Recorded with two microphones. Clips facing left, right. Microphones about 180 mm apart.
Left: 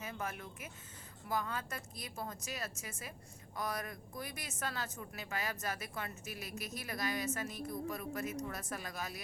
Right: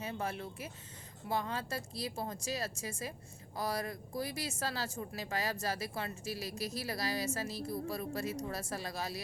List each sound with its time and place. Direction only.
0.0 s speech: 30° right (ahead or behind)